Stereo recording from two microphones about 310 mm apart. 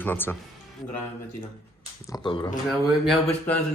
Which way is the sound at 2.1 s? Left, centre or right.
Centre.